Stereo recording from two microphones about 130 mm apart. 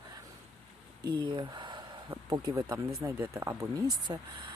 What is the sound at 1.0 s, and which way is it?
Speech, 35° right (ahead or behind).